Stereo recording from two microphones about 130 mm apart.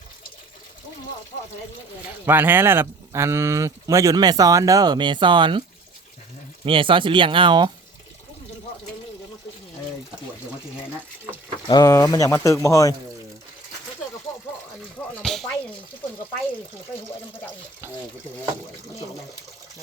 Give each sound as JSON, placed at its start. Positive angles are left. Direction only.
{"t": 2.2, "sound": "speech", "side_deg": -15}
{"t": 6.7, "sound": "speech", "side_deg": -40}
{"t": 11.7, "sound": "speech", "side_deg": 25}
{"t": 15.2, "sound": "a sound", "side_deg": 0}